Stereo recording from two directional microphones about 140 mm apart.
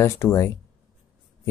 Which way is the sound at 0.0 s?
20° left (ahead or behind).